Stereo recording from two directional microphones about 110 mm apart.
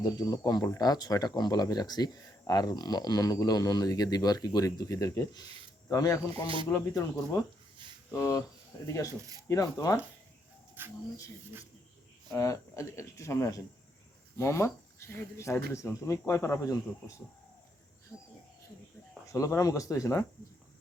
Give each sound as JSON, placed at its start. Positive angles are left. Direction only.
{"t": 0.0, "sound": "speech", "side_deg": 40}
{"t": 6.7, "sound": "speech", "side_deg": 20}
{"t": 8.1, "sound": "speech", "side_deg": 30}
{"t": 9.5, "sound": "speech", "side_deg": 30}
{"t": 10.8, "sound": "speech", "side_deg": -20}
{"t": 12.3, "sound": "speech", "side_deg": 30}
{"t": 18.1, "sound": "a sound", "side_deg": -10}
{"t": 19.3, "sound": "speech", "side_deg": 30}